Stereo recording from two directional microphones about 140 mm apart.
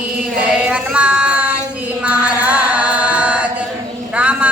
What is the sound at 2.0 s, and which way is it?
Chant, 10° right (ahead or behind).